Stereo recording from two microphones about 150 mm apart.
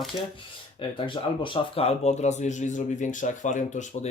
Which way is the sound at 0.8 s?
35° left (ahead or behind).